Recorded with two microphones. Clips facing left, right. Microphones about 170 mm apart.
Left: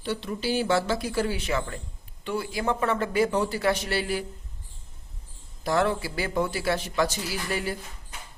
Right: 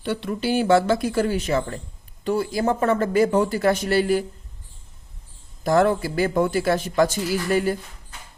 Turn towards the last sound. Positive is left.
turn(degrees=-45)  # may be behind; listen again after turning